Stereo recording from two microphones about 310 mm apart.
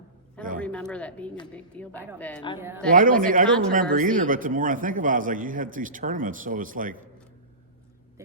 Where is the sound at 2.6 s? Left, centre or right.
Centre.